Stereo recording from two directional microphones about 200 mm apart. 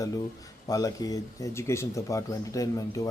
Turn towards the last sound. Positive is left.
turn(degrees=15)  # may be behind; listen again after turning